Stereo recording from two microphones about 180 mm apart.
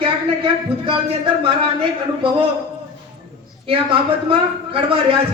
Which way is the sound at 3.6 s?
30° right (ahead or behind).